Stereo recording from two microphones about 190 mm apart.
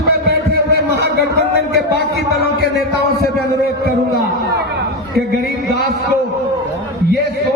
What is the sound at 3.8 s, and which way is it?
Chatter, 55° right (ahead or behind).